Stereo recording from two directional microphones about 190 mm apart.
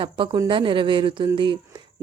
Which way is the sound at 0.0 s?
25° right (ahead or behind).